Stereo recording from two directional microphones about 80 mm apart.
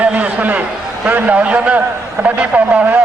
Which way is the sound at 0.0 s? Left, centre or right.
Centre.